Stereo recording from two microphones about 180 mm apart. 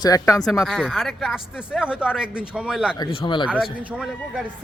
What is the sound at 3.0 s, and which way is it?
Speech, 25° left (ahead or behind).